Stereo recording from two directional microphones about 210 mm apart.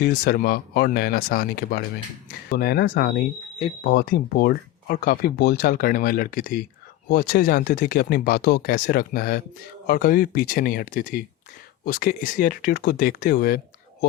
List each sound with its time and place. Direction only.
0.0 s speech: 45° left (ahead or behind)